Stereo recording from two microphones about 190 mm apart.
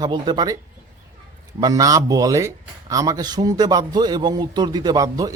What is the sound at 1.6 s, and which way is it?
A man's voice, 20° right (ahead or behind).